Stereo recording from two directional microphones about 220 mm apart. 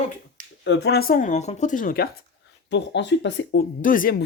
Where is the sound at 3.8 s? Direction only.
40° left (ahead or behind).